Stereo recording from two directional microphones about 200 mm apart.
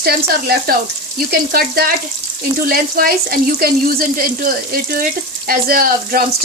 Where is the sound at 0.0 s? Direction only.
50° right (ahead or behind).